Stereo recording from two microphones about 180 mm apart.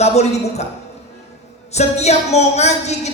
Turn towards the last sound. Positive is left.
turn(degrees=40)  # may be behind; listen again after turning